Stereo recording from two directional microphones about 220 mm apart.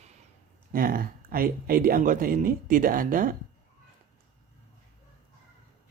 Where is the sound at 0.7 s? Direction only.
40° right (ahead or behind).